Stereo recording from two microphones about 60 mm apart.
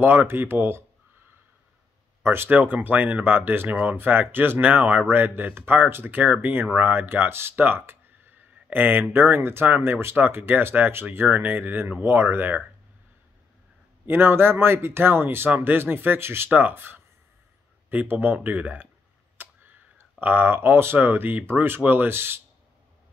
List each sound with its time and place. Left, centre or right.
0.0 s speech: right
2.2 s speech: right
14.0 s speech: right
16.4 s speech: right